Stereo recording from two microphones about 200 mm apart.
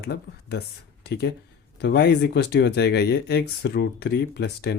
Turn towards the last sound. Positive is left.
turn(degrees=55)  # may be behind; listen again after turning